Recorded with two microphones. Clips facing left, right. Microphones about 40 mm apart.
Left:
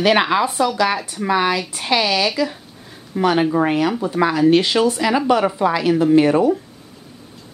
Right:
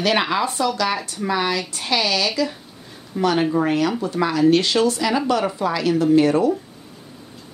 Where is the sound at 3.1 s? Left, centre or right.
Centre.